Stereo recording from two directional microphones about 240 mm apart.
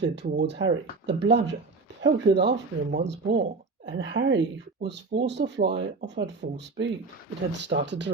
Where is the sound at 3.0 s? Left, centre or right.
Right.